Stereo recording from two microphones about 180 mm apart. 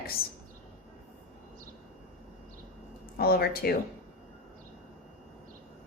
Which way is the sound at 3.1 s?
55° left (ahead or behind).